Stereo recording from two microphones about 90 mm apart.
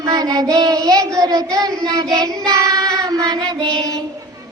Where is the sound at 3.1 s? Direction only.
45° right (ahead or behind).